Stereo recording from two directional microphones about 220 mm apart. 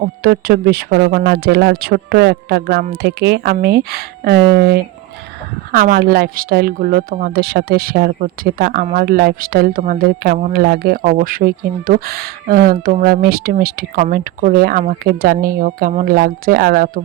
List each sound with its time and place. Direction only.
0.0 s speech: 45° right (ahead or behind)